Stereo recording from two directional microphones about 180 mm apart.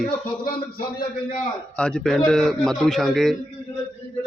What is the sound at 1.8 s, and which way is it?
Speech, 5° left (ahead or behind).